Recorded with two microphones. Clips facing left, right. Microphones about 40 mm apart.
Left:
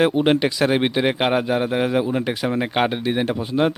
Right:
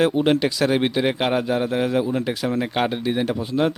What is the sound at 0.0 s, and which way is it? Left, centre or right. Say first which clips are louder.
A man's voice: left 1 dB; left.